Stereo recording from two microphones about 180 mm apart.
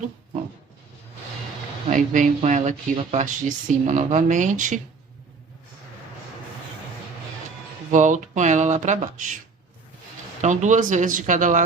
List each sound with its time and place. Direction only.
1.9 s speech: 45° right (ahead or behind)
7.9 s speech: 45° right (ahead or behind)
10.4 s speech: 40° right (ahead or behind)